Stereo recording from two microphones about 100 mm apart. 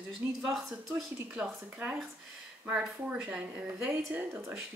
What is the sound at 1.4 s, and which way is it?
A woman's voice, 15° right (ahead or behind).